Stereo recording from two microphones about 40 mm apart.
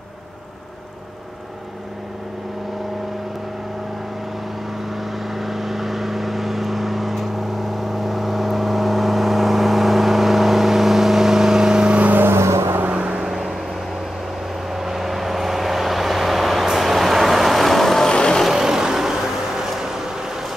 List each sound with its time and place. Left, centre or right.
5.3 s vehicle: centre
11.9 s vehicle: right
12.2 s vehicle: right
12.9 s vehicle: right
13.3 s vehicle: centre
14.7 s vehicle: centre
18.1 s vehicle: centre
18.5 s vehicle: centre